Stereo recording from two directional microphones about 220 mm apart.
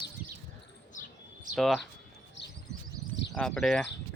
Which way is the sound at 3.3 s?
Centre (ahead or behind).